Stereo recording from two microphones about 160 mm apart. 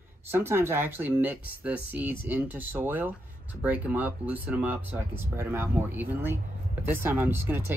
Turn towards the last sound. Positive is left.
turn(degrees=-15)  # may be behind; listen again after turning